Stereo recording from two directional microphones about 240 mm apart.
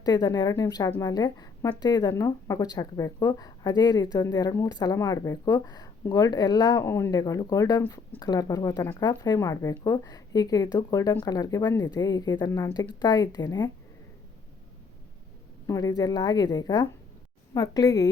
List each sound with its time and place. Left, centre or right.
0.0 s speech: centre
15.6 s speech: centre